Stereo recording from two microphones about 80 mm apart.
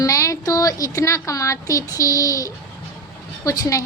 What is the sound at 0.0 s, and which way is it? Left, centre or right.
A woman's voice, left.